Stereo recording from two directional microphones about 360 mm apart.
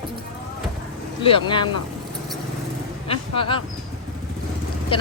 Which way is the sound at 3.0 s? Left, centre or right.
Centre.